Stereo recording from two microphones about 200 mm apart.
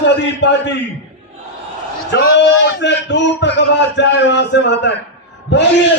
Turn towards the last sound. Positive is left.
turn(degrees=60)  # may be behind; listen again after turning